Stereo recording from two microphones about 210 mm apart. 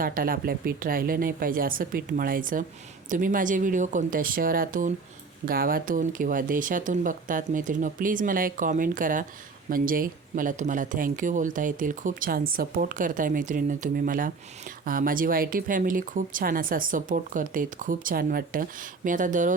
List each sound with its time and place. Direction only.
0.0 s a woman's voice: 40° right (ahead or behind)